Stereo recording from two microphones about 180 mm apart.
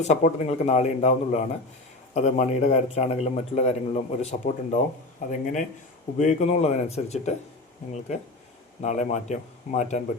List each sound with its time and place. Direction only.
0.0 s a man's voice: 40° left (ahead or behind)
8.8 s a man's voice: 40° left (ahead or behind)